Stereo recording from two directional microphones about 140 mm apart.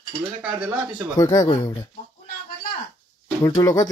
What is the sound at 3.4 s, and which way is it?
Speech, 25° left (ahead or behind).